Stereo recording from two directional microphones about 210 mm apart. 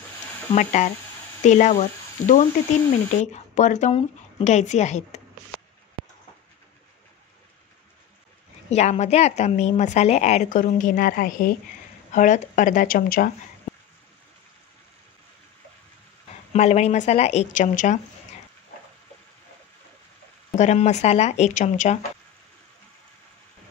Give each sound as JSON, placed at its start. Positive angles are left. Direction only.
{"t": 0.5, "sound": "speech", "side_deg": 35}
{"t": 8.6, "sound": "speech", "side_deg": 30}
{"t": 16.5, "sound": "speech", "side_deg": 30}
{"t": 20.5, "sound": "speech", "side_deg": 35}